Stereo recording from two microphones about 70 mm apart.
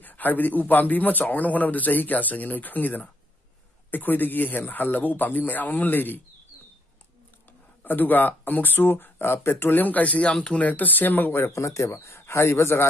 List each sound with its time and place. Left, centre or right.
0.0 s a man's voice: left
7.8 s a man's voice: left
11.5 s speech: left